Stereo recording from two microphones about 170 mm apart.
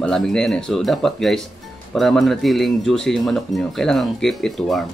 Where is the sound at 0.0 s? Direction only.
5° left (ahead or behind).